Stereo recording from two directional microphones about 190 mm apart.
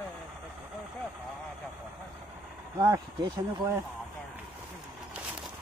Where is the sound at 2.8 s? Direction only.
15° right (ahead or behind).